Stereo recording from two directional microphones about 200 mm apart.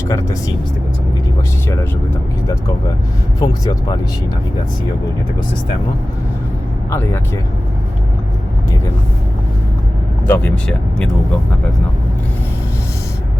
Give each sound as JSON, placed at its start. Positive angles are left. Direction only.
{"t": 0.1, "sound": "speech", "side_deg": 15}
{"t": 3.4, "sound": "speech", "side_deg": 20}
{"t": 6.9, "sound": "speech", "side_deg": 10}
{"t": 10.2, "sound": "speech", "side_deg": 10}